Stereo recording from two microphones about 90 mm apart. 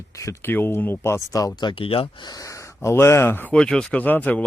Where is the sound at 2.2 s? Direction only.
40° left (ahead or behind); by 3.5 s 25° left (ahead or behind).